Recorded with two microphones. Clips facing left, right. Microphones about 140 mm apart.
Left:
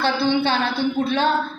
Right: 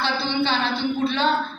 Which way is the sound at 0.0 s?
50° left (ahead or behind).